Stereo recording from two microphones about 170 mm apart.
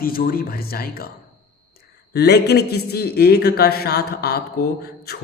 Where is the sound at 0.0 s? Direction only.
60° left (ahead or behind).